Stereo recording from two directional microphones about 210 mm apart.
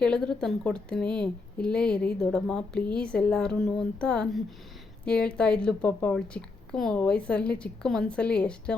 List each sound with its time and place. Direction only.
0.0 s speech: 5° left (ahead or behind)